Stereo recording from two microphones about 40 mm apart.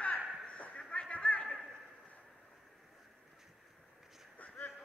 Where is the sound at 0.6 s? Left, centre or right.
Left.